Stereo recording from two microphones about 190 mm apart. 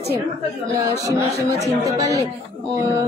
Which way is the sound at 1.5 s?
20° right (ahead or behind).